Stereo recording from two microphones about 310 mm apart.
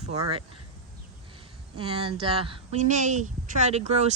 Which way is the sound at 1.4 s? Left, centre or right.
Centre.